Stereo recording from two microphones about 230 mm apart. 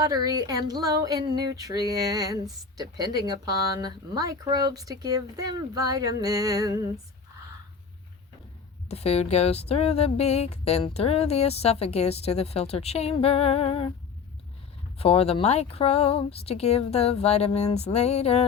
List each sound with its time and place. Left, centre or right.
0.0 s a sound: centre
8.9 s speech: left
14.9 s speech: left